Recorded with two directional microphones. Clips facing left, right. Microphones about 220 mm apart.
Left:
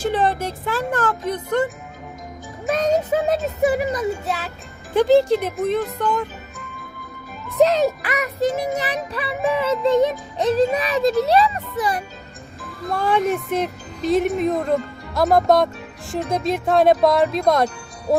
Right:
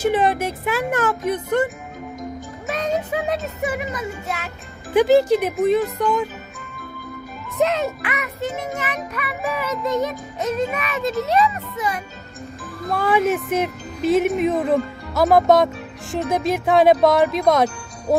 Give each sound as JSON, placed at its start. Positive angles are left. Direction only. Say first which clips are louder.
{"t": 0.3, "sound": "speech", "louder": "right 2 dB", "side_deg": -10}
{"t": 2.6, "sound": "music", "louder": "left 4 dB", "side_deg": 40}
{"t": 4.9, "sound": "speech", "louder": "even", "side_deg": -5}
{"t": 7.5, "sound": "a child's voice", "louder": "left 4 dB", "side_deg": 35}
{"t": 12.9, "sound": "speech", "louder": "right 1 dB", "side_deg": -5}